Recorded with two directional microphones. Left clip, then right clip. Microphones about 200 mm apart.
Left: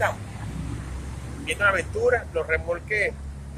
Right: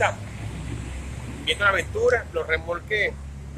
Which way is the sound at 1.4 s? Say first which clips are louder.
Right 1 dB; 5° right (ahead or behind).